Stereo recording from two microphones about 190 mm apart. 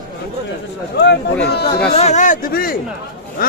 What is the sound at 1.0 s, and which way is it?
Speech, 60° left (ahead or behind).